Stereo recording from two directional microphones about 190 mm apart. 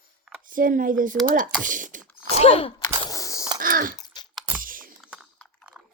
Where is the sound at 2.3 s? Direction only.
35° left (ahead or behind).